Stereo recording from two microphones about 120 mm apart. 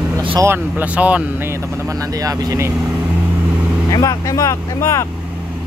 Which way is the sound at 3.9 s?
30° left (ahead or behind).